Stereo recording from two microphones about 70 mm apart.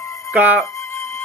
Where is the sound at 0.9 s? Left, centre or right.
Left.